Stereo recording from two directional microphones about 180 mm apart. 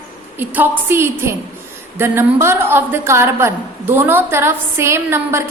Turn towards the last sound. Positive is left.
turn(degrees=-15)  # may be behind; listen again after turning